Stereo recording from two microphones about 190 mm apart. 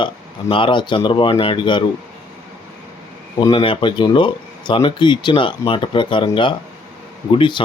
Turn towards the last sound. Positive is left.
turn(degrees=25)  # may be behind; listen again after turning